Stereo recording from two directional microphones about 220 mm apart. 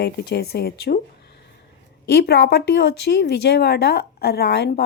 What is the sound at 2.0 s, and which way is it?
Speech, 45° left (ahead or behind).